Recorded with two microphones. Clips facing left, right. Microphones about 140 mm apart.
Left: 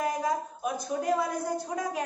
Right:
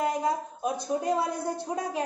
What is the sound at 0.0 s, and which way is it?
A woman's voice, 25° right (ahead or behind).